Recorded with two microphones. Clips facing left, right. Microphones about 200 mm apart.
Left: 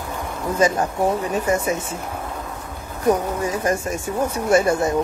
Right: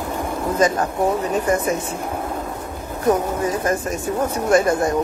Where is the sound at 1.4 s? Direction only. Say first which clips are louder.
Even; 10° left (ahead or behind).